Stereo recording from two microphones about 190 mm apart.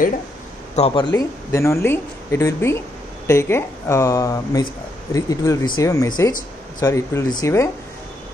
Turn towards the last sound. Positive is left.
turn(degrees=15)  # may be behind; listen again after turning